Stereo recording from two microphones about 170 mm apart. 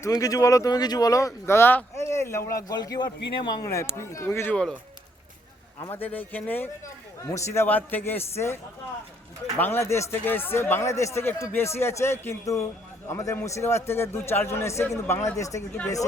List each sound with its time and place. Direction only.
0.0 s speech: 20° left (ahead or behind)
5.9 s speech: 10° left (ahead or behind)
9.6 s speech: 15° left (ahead or behind)